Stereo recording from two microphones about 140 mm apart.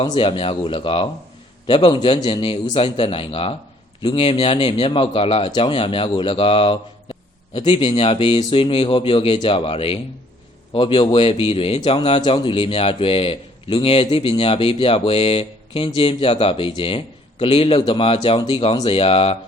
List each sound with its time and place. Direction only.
0.0 s speech: 35° left (ahead or behind)